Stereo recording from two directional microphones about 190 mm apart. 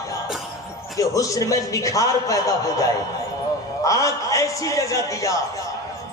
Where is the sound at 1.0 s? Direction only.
15° left (ahead or behind).